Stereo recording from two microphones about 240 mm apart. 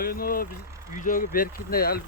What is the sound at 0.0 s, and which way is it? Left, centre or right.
Speech, left.